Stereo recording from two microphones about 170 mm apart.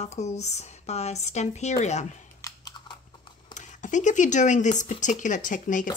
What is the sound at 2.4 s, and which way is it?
Computer keyboard, 25° left (ahead or behind).